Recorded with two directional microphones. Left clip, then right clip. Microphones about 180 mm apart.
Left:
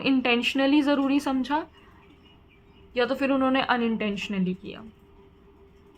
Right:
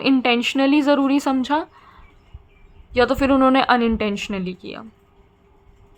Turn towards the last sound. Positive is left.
turn(degrees=-30)  # may be behind; listen again after turning